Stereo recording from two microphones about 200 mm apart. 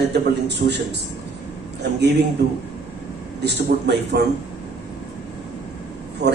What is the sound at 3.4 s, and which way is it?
Speech, 55° right (ahead or behind).